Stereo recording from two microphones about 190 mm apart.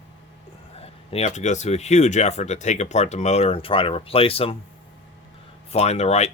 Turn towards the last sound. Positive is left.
turn(degrees=35)  # may be behind; listen again after turning